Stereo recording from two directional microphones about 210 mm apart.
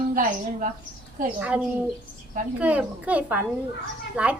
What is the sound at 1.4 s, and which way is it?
A woman's voice, 5° right (ahead or behind).